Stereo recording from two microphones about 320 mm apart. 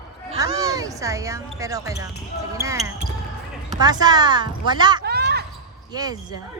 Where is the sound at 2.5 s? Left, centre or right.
Centre.